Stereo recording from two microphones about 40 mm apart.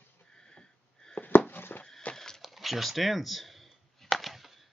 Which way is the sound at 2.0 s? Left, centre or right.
Left.